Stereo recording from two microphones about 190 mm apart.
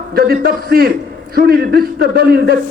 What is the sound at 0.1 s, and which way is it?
A man's voice, 55° right (ahead or behind).